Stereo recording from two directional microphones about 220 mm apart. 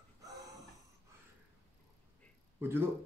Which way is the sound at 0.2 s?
15° right (ahead or behind).